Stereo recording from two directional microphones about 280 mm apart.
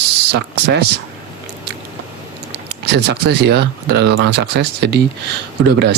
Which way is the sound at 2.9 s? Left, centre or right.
Right.